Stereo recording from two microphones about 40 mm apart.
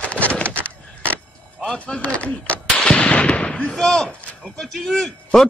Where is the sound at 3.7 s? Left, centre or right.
Centre.